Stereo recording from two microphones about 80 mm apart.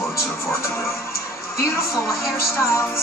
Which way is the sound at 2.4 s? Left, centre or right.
Left.